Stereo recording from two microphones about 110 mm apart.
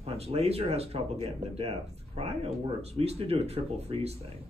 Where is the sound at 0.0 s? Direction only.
65° right (ahead or behind).